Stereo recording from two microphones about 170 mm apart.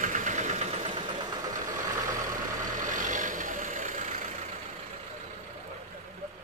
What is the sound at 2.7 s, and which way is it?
Vehicle, 50° right (ahead or behind).